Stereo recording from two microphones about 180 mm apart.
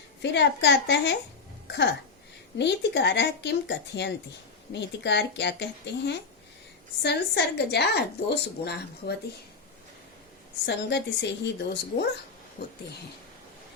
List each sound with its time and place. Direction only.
0.2 s a woman's voice: 70° left (ahead or behind)
10.7 s a woman's voice: 75° left (ahead or behind)